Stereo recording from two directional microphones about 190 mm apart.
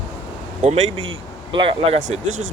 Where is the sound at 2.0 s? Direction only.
90° right.